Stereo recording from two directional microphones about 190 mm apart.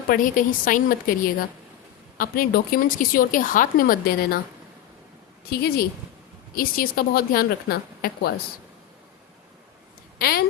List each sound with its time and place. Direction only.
0.1 s speech: 50° left (ahead or behind)
2.1 s speech: 50° left (ahead or behind)
5.5 s speech: 55° left (ahead or behind)
10.2 s speech: 50° left (ahead or behind)